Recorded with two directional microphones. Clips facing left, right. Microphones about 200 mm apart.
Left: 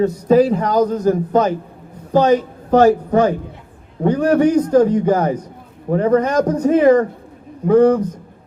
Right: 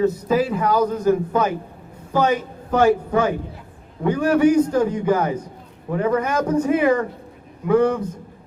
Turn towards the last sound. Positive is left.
turn(degrees=35)  # may be behind; listen again after turning